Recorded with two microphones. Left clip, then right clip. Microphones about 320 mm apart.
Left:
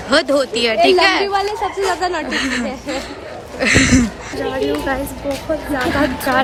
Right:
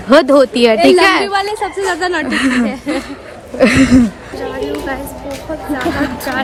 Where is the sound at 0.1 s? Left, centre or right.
Centre.